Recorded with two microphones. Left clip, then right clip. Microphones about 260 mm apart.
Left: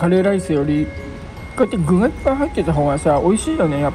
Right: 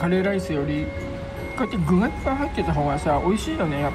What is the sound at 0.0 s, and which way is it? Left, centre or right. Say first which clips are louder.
Speech: left 6 dB; centre.